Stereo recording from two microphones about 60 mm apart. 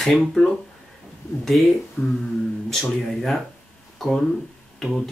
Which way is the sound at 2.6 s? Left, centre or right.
Centre.